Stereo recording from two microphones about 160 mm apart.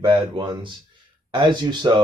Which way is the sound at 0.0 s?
30° right (ahead or behind).